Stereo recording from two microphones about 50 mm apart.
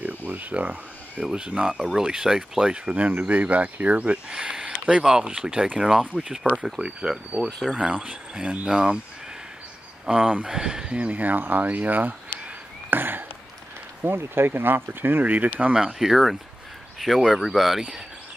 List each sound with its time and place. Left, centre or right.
0.0 s a sound: right
1.2 s speech: centre
1.8 s speech: centre
3.1 s speech: right
4.3 s speech: centre
8.6 s speech: centre
10.0 s speech: centre
11.0 s speech: right
16.0 s speech: centre